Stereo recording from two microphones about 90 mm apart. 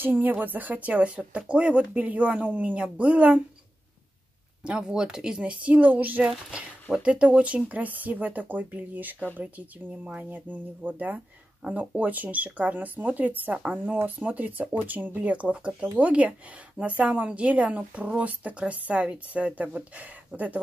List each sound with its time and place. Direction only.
0.0 s speech: 20° right (ahead or behind)
4.6 s speech: 10° right (ahead or behind)